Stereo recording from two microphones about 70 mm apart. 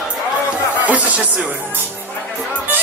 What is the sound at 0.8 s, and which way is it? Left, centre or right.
Music, right.